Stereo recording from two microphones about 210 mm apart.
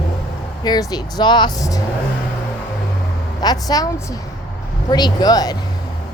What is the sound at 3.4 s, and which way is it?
A woman's voice, 20° left (ahead or behind).